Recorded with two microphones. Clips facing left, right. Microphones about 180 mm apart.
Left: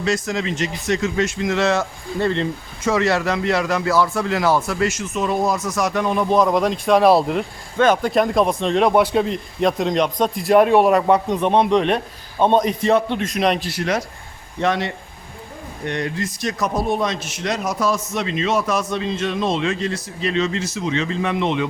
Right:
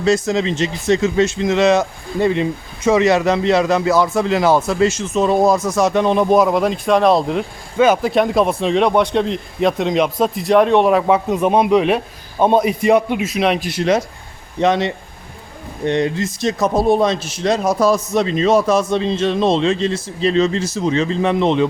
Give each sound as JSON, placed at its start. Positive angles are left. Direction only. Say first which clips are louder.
{"t": 0.0, "sound": "speech", "louder": "right 6 dB", "side_deg": -25}
{"t": 6.3, "sound": "speech", "louder": "right 3 dB", "side_deg": -5}
{"t": 13.6, "sound": "a man's voice", "louder": "right 6 dB", "side_deg": -20}